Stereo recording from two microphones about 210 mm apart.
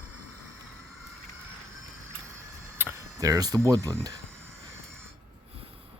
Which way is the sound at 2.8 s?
10° right (ahead or behind).